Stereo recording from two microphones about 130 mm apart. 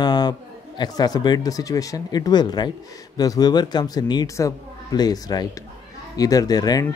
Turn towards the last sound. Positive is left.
turn(degrees=30)  # may be behind; listen again after turning